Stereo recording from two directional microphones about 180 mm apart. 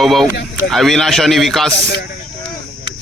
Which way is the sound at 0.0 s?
Centre (ahead or behind).